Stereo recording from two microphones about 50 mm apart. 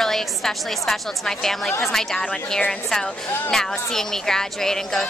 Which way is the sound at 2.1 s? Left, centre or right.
Left.